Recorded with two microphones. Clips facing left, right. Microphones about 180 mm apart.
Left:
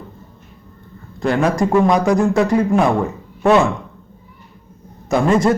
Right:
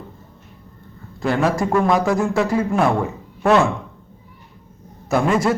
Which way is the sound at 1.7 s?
15° left (ahead or behind).